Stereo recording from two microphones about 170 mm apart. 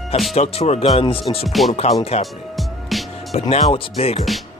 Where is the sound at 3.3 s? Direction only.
35° left (ahead or behind).